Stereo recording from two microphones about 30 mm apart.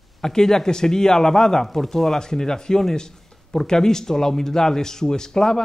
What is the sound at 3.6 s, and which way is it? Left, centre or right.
Speech, centre.